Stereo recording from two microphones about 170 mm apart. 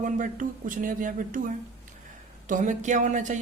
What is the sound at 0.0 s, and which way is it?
A man's voice, 50° right (ahead or behind).